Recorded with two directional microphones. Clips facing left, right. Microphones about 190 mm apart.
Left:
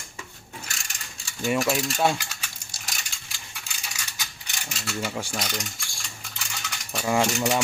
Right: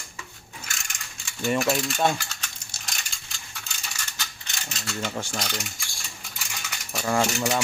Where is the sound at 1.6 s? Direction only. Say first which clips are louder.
Even; 5° left (ahead or behind).